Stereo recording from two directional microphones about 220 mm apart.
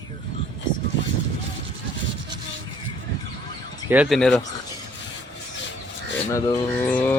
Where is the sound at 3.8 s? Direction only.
5° right (ahead or behind).